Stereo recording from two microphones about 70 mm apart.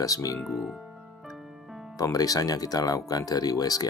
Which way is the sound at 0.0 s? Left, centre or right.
Left.